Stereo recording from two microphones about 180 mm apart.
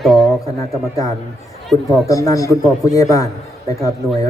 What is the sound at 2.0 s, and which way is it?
Speech, 20° left (ahead or behind).